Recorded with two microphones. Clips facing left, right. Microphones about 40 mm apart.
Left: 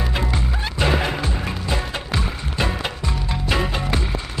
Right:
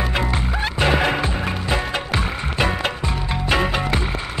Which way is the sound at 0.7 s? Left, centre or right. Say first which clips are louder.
Right 2 dB; right.